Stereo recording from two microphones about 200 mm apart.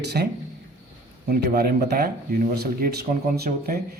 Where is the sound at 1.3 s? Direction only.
50° right (ahead or behind).